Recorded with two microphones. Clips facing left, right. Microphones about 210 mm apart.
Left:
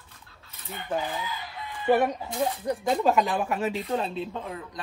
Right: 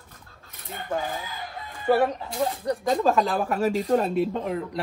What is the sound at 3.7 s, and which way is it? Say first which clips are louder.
Speech: right 6 dB; 45° right (ahead or behind).